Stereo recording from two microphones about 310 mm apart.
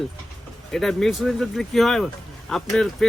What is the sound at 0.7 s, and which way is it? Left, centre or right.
Speech, centre.